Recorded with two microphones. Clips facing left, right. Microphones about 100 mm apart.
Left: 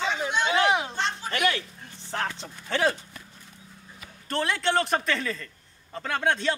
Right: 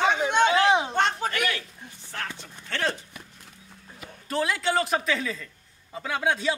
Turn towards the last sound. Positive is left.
turn(degrees=-5)  # may be behind; listen again after turning